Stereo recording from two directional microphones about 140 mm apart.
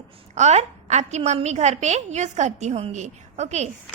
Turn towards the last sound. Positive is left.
turn(degrees=-55)  # may be behind; listen again after turning